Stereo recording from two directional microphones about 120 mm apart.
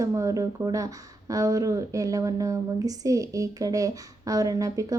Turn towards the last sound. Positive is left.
turn(degrees=-30)  # may be behind; listen again after turning